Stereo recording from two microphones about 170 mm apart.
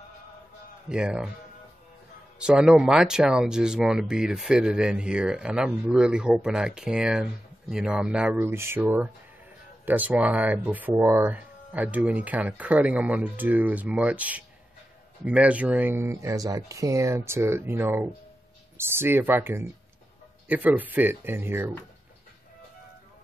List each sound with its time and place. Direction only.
0.8 s speech: 5° right (ahead or behind)
2.3 s speech: 5° right (ahead or behind)